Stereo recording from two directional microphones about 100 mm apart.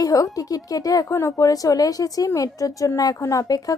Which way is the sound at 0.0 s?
35° left (ahead or behind).